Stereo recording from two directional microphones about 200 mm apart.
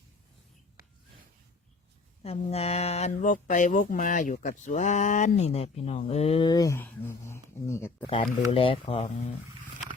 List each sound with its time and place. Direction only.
2.2 s speech: 30° left (ahead or behind); by 7.9 s 15° left (ahead or behind)
8.0 s speech: 25° left (ahead or behind)